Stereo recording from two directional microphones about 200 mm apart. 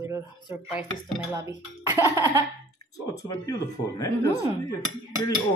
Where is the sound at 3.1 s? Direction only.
15° left (ahead or behind).